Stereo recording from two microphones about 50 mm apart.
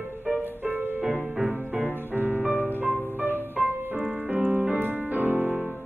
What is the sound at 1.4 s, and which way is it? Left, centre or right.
Music, right.